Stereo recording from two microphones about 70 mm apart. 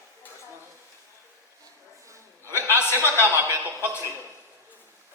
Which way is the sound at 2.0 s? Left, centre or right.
Right.